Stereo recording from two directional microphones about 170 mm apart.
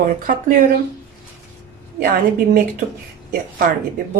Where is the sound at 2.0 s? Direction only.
55° right (ahead or behind).